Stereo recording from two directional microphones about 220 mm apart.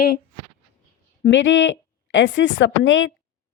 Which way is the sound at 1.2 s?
55° left (ahead or behind).